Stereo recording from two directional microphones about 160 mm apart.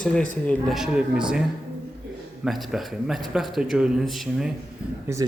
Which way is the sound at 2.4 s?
Centre (ahead or behind).